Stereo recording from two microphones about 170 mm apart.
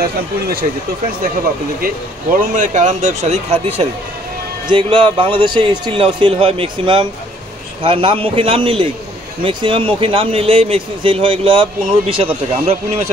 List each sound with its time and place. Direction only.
0.0 s speech: 65° right (ahead or behind)
2.3 s speech: 50° right (ahead or behind); by 12.7 s 35° right (ahead or behind)